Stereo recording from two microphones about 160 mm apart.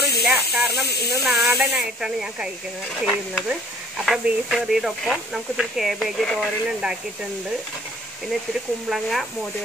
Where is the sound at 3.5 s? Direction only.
5° right (ahead or behind).